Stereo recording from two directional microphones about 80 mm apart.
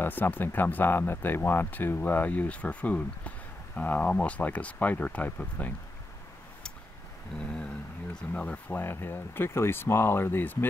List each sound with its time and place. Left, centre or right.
0.0 s speech: left
8.3 s speech: centre